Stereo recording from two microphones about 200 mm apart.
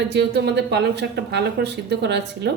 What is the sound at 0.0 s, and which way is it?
Speech, 55° right (ahead or behind).